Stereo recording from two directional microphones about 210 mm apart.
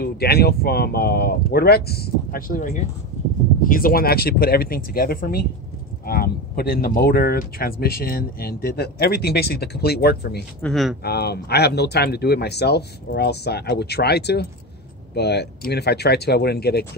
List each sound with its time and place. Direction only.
0.0 s speech: 50° left (ahead or behind)
10.6 s speech: centre (ahead or behind)
11.1 s speech: 50° left (ahead or behind)